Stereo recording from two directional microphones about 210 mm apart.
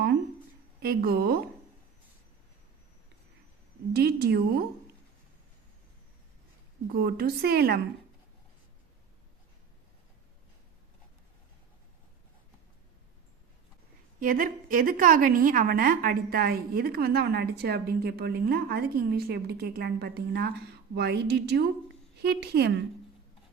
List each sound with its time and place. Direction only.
0.8 s a woman's voice: 50° right (ahead or behind)
3.9 s a woman's voice: 50° right (ahead or behind)
6.8 s a woman's voice: 45° right (ahead or behind)
14.2 s a woman's voice: 40° right (ahead or behind)